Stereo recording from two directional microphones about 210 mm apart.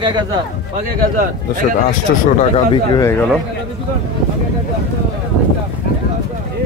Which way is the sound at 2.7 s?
20° left (ahead or behind).